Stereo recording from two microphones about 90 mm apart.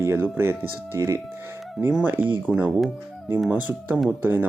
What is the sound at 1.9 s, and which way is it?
Speech, 20° right (ahead or behind).